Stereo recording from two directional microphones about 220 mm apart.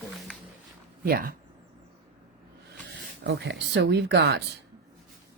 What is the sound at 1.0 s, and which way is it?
Speech, 40° right (ahead or behind).